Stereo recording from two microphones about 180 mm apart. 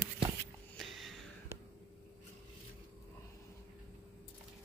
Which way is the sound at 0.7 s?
Centre (ahead or behind).